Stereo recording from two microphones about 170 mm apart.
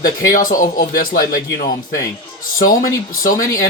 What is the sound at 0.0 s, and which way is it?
Speech, 55° left (ahead or behind).